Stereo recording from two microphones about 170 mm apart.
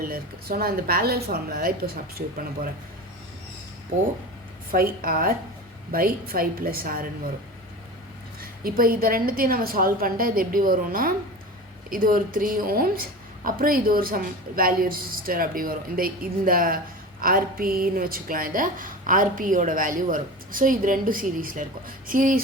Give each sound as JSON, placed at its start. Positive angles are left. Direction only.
{"t": 0.0, "sound": "a woman's voice", "side_deg": -60}
{"t": 4.7, "sound": "a woman's voice", "side_deg": -60}
{"t": 8.4, "sound": "a woman's voice", "side_deg": -60}